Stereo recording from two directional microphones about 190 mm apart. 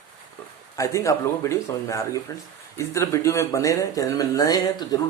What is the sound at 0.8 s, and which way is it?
Speech, 15° left (ahead or behind).